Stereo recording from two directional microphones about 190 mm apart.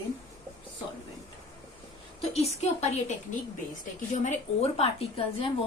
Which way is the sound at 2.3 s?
35° left (ahead or behind).